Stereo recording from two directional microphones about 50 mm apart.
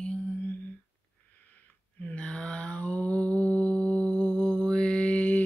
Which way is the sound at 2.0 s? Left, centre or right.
Left.